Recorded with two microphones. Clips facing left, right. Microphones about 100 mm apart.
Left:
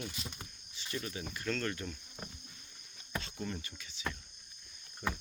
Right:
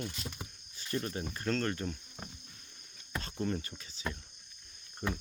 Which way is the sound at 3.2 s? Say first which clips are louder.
Right 6 dB; 40° right (ahead or behind).